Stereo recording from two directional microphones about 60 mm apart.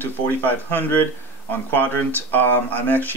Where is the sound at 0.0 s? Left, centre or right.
Left.